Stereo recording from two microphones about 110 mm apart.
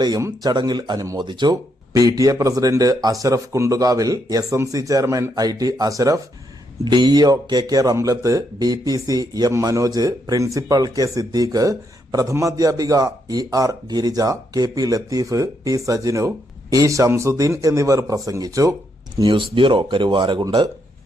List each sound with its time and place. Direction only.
0.0 s speech: 30° right (ahead or behind)
0.5 s speech: 40° right (ahead or behind)
6.8 s speech: 40° right (ahead or behind)
19.5 s speech: 50° right (ahead or behind)
20.4 s speech: 35° right (ahead or behind)